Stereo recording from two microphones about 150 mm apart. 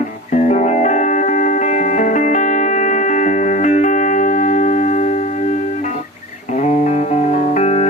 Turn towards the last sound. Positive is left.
turn(degrees=45)  # may be behind; listen again after turning